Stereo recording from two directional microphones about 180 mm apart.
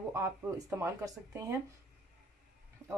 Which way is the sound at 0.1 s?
15° right (ahead or behind).